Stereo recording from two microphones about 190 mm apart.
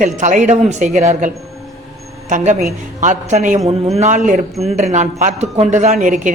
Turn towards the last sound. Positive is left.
turn(degrees=-40)  # may be behind; listen again after turning